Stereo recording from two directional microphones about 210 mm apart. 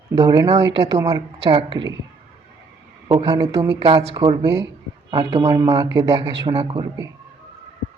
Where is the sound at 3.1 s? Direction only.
20° right (ahead or behind).